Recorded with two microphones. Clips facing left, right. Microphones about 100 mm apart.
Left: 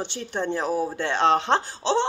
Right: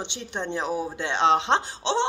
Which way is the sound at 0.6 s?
40° left (ahead or behind).